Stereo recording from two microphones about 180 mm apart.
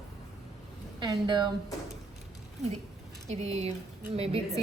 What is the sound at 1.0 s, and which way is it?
Speech, 25° right (ahead or behind).